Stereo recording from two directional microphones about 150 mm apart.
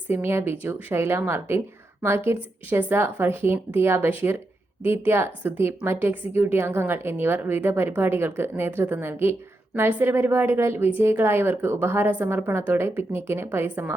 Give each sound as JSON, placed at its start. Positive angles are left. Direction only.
{"t": 0.1, "sound": "a woman's voice", "side_deg": -15}